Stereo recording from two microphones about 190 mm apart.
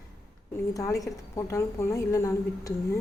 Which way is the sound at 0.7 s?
20° left (ahead or behind).